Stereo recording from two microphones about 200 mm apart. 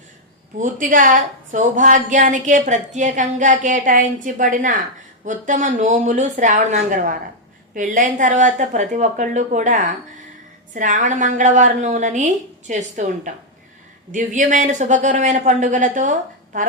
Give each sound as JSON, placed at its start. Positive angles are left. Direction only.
{"t": 0.6, "sound": "a woman's voice", "side_deg": -40}